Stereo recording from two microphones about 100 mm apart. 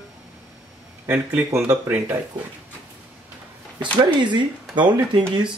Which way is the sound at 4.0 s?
50° right (ahead or behind).